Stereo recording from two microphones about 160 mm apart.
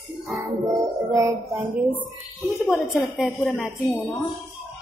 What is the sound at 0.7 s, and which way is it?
Speech, 20° right (ahead or behind).